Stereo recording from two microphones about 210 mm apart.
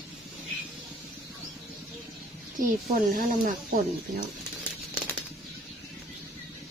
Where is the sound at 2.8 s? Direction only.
40° right (ahead or behind).